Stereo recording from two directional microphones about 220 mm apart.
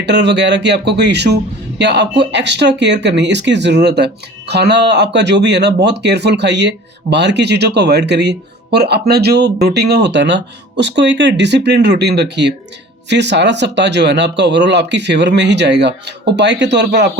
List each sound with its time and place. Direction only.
0.0 s speech: 50° right (ahead or behind)